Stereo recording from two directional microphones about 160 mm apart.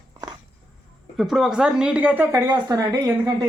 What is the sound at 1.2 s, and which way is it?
Speech, centre (ahead or behind).